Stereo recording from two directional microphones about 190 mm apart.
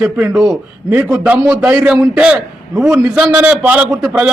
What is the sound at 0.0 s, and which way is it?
A man's voice, 5° right (ahead or behind).